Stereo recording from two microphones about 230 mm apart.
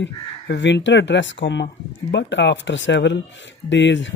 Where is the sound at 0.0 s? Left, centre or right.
Left.